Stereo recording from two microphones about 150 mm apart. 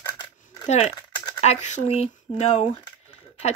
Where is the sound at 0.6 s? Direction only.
50° left (ahead or behind).